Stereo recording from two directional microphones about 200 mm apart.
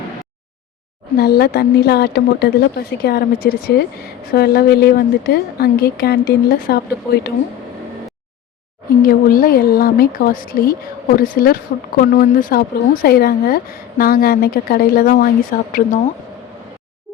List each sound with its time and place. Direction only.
1.1 s speech: 50° left (ahead or behind)
9.0 s speech: 45° left (ahead or behind)